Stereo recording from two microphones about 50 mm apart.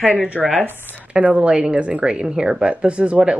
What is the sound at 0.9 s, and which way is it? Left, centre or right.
Speech, right.